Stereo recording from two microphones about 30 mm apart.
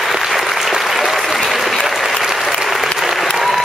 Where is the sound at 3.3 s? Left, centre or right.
Centre.